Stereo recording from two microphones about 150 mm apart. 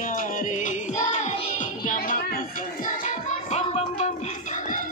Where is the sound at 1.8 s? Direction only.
65° left (ahead or behind).